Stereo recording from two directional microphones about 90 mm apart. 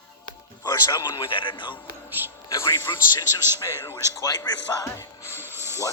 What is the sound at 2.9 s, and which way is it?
A man's voice, 45° left (ahead or behind).